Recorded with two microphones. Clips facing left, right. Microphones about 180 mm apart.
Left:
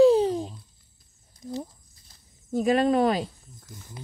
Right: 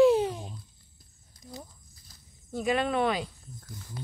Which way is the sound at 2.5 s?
40° left (ahead or behind).